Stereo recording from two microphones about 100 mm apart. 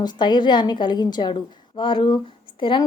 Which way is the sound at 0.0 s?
45° left (ahead or behind).